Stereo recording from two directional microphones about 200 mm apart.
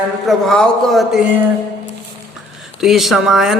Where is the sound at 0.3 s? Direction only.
Centre (ahead or behind).